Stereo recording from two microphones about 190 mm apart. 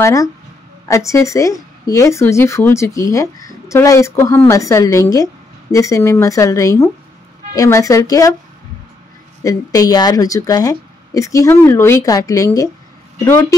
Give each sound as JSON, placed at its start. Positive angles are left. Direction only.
{"t": 0.0, "sound": "speech", "side_deg": 15}
{"t": 9.4, "sound": "speech", "side_deg": 20}